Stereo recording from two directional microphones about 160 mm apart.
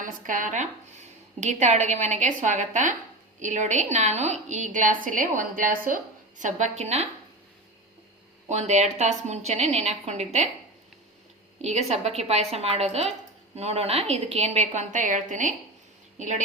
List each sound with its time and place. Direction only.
0.0 s a woman's voice: 55° right (ahead or behind)
6.4 s a woman's voice: 45° right (ahead or behind)
8.4 s a woman's voice: 45° right (ahead or behind)
11.6 s a woman's voice: 45° right (ahead or behind)